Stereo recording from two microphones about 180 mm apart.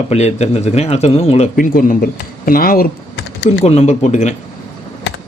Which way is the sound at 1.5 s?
50° left (ahead or behind).